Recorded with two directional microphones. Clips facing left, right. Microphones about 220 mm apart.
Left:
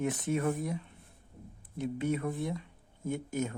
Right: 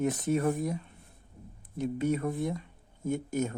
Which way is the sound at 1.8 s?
40° right (ahead or behind).